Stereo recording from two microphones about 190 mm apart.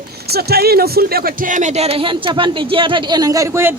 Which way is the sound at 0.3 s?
55° right (ahead or behind).